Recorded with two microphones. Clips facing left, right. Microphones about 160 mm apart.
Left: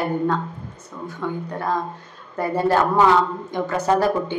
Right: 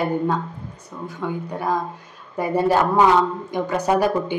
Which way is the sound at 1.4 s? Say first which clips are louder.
Right 2 dB; 10° right (ahead or behind).